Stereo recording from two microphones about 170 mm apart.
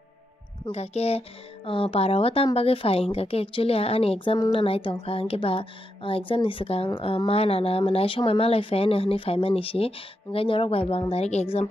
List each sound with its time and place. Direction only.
0.7 s speech: 35° left (ahead or behind)